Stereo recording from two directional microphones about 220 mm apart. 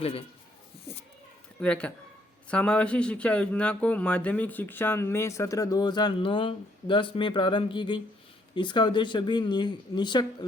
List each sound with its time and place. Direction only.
0.0 s speech: 25° left (ahead or behind)
1.6 s speech: 5° left (ahead or behind)